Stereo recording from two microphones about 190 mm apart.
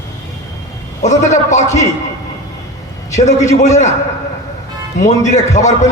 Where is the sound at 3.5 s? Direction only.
40° left (ahead or behind).